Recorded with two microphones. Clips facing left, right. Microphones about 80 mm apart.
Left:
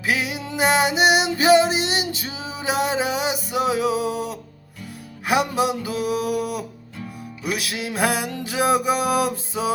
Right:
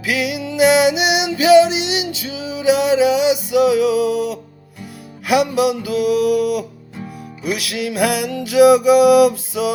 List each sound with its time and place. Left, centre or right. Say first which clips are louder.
0.0 s music: right 4 dB; left